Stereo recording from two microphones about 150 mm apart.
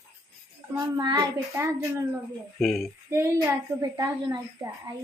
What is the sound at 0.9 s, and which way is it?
Speech, 25° right (ahead or behind).